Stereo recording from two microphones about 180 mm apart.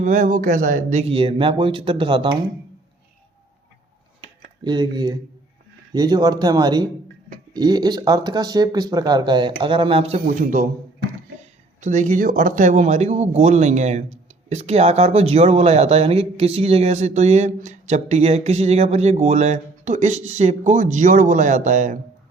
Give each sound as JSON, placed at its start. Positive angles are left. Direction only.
{"t": 0.0, "sound": "speech", "side_deg": -45}
{"t": 4.2, "sound": "a sound", "side_deg": -25}
{"t": 5.9, "sound": "speech", "side_deg": -20}
{"t": 10.4, "sound": "speech", "side_deg": -50}
{"t": 11.8, "sound": "speech", "side_deg": -40}